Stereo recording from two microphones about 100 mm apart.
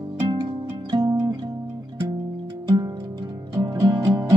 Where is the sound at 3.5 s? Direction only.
45° right (ahead or behind).